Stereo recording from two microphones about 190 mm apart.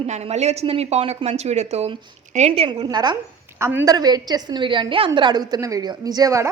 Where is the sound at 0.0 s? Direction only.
35° right (ahead or behind).